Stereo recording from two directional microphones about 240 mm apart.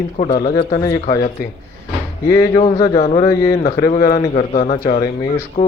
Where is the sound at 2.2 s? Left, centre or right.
Centre.